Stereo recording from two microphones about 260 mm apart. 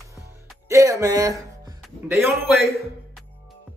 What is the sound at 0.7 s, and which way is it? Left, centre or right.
Music, centre.